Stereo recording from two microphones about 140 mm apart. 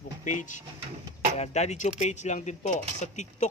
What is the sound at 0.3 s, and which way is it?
Speech, 60° left (ahead or behind).